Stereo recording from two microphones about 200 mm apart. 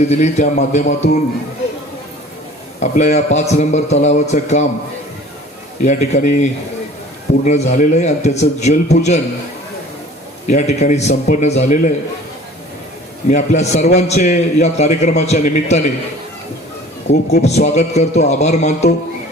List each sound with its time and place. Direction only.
0.1 s a man's voice: 35° left (ahead or behind)
2.8 s a man's voice: 35° left (ahead or behind)
5.8 s a man's voice: 40° left (ahead or behind)
10.5 s a man's voice: 35° left (ahead or behind)
13.3 s a man's voice: 35° left (ahead or behind)
17.1 s a man's voice: 35° left (ahead or behind)